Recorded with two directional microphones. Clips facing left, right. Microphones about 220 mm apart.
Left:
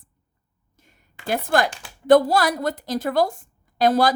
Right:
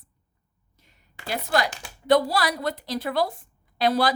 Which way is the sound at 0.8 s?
50° left (ahead or behind).